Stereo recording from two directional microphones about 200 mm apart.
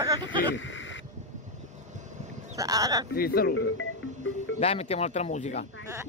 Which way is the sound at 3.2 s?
50° left (ahead or behind).